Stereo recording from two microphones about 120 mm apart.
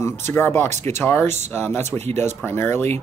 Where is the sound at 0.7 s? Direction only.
75° right (ahead or behind).